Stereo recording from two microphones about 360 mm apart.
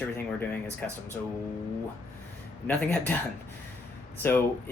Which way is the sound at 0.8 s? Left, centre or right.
Centre.